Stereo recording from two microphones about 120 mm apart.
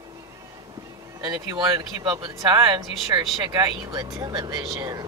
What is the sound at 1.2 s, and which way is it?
Speech, 35° right (ahead or behind).